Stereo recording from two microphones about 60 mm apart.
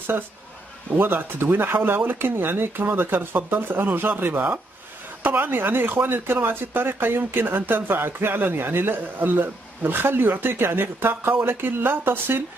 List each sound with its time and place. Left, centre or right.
0.9 s speech: right